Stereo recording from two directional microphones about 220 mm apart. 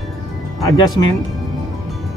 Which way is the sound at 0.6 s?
20° left (ahead or behind).